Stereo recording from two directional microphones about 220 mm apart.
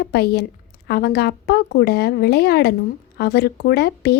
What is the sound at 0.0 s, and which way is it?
Speech, 45° left (ahead or behind).